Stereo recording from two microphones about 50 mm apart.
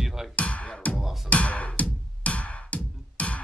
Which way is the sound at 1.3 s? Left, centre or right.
Left.